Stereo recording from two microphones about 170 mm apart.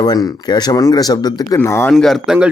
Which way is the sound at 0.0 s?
20° left (ahead or behind).